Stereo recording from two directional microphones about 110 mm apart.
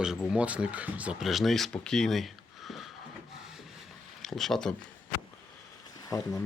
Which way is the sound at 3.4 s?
5° right (ahead or behind).